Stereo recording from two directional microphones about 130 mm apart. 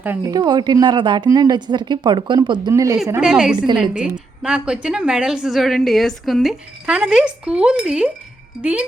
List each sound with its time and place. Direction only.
0.3 s a woman's voice: 30° right (ahead or behind)
3.2 s a woman's voice: 5° right (ahead or behind)